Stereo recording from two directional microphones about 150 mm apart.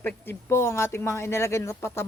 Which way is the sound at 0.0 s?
15° left (ahead or behind).